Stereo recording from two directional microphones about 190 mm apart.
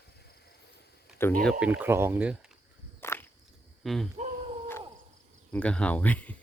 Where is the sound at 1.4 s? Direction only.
Centre (ahead or behind).